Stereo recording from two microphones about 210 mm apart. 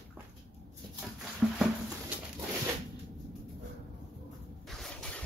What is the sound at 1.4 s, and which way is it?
Music, centre (ahead or behind).